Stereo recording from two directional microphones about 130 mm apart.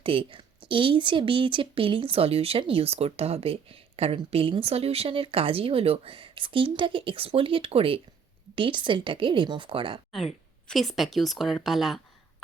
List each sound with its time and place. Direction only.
0.0 s a woman's voice: 45° right (ahead or behind)
10.1 s speech: centre (ahead or behind)